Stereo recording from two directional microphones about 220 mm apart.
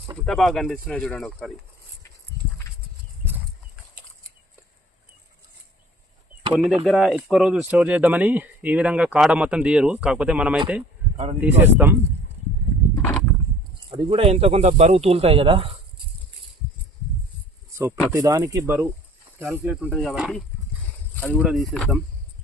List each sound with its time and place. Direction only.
0.3 s speech: centre (ahead or behind)
6.5 s speech: 5° right (ahead or behind)
13.0 s a sound: 5° left (ahead or behind)
13.9 s speech: 25° right (ahead or behind)
17.7 s a sound: 15° right (ahead or behind)
18.1 s speech: 15° right (ahead or behind); by 21.9 s centre (ahead or behind)